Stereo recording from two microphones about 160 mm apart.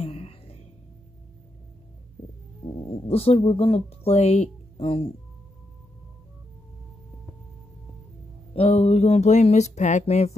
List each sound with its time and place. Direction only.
0.0 s music: 35° left (ahead or behind)
3.1 s speech: 40° left (ahead or behind)
8.5 s a sound: 40° left (ahead or behind)